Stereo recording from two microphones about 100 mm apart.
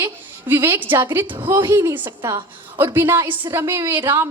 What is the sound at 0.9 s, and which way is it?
Speech, 45° right (ahead or behind).